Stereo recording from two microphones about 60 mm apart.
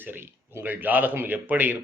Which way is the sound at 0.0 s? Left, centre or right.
Right.